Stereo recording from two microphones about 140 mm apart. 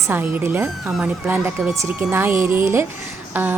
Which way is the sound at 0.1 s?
15° right (ahead or behind).